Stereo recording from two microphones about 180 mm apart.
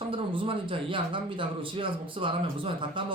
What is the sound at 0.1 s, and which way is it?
A man's voice, 30° right (ahead or behind).